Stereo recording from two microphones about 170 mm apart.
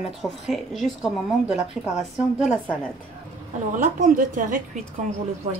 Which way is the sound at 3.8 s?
50° right (ahead or behind).